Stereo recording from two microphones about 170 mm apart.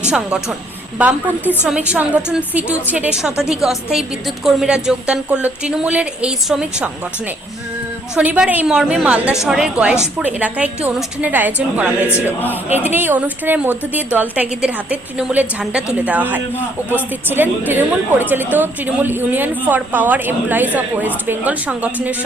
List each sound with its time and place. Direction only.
0.1 s a woman's voice: 5° right (ahead or behind)
8.1 s a woman's voice: 5° right (ahead or behind)